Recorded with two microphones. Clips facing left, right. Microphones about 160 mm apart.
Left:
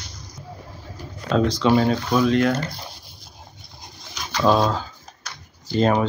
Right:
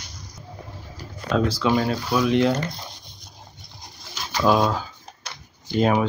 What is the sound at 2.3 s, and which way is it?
Speech, 15° right (ahead or behind).